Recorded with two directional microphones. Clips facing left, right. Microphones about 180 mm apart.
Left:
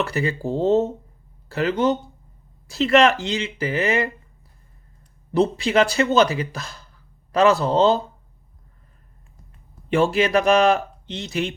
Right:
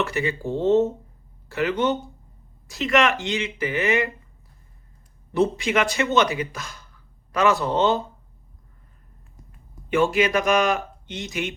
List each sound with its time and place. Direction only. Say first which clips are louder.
0.0 s speech: left 1 dB; 35° left (ahead or behind)
5.3 s speech: left 2 dB; 35° left (ahead or behind)
9.9 s speech: left 2 dB; 35° left (ahead or behind)